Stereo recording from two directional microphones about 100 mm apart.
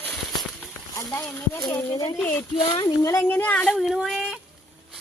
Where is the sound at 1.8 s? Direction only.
35° left (ahead or behind).